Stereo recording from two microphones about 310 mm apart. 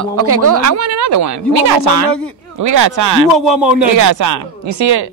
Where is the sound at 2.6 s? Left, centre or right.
Right.